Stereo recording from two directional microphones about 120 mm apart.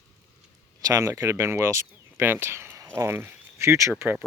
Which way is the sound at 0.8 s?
25° right (ahead or behind).